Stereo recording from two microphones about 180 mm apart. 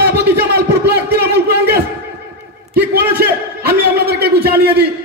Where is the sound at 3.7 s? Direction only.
60° right (ahead or behind).